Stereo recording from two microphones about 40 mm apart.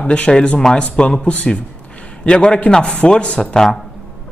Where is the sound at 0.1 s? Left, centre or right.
Left.